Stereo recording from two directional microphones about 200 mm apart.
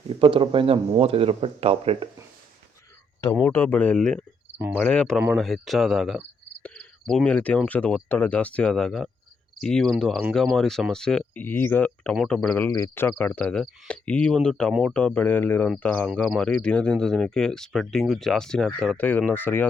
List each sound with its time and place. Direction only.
0.1 s speech: 25° right (ahead or behind)
3.4 s speech: 10° left (ahead or behind)
4.5 s cricket: 10° right (ahead or behind)
4.8 s speech: 5° left (ahead or behind)